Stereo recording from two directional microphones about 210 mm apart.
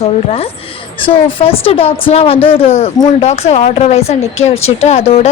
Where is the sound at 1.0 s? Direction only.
25° left (ahead or behind).